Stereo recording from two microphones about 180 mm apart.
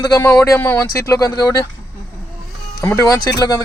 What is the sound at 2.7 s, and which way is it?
Speech, 20° left (ahead or behind).